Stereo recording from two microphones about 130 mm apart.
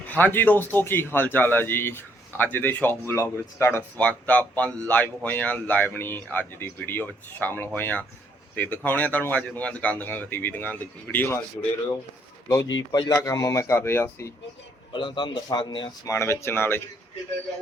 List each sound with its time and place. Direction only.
0.1 s speech: 15° left (ahead or behind)
12.5 s speech: 30° left (ahead or behind)
14.9 s a man's voice: 40° left (ahead or behind)
16.0 s speech: 20° left (ahead or behind)